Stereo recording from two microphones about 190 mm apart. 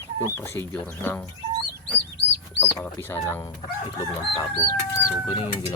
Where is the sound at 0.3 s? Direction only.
15° left (ahead or behind).